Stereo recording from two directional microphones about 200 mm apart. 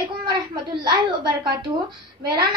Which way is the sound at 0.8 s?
20° right (ahead or behind).